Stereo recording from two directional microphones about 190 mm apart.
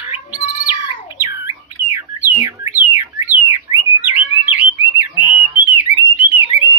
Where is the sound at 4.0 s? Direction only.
10° right (ahead or behind).